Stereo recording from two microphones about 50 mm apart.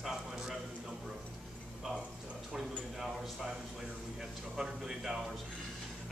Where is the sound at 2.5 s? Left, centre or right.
Centre.